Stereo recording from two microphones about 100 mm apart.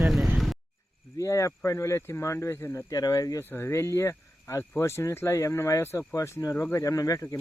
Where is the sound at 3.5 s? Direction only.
25° left (ahead or behind).